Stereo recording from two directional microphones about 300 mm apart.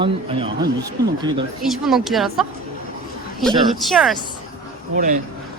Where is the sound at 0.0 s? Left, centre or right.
Centre.